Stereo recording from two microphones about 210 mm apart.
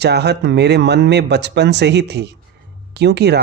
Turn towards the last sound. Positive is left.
turn(degrees=-50)  # may be behind; listen again after turning